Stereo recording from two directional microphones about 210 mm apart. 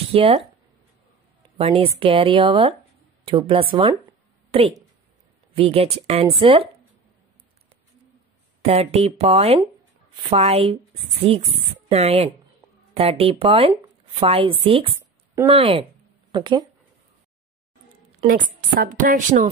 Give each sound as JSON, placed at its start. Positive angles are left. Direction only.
{"t": 0.1, "sound": "speech", "side_deg": -25}
{"t": 1.4, "sound": "a woman's voice", "side_deg": -25}
{"t": 8.6, "sound": "speech", "side_deg": -30}
{"t": 18.2, "sound": "a woman's voice", "side_deg": -40}